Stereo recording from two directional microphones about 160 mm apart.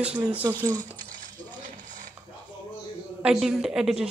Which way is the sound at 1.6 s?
55° right (ahead or behind).